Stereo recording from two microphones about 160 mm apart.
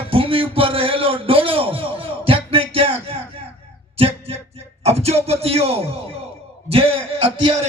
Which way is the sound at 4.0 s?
40° right (ahead or behind).